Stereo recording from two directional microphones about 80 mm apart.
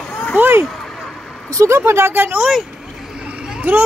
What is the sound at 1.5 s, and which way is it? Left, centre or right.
Speech, right.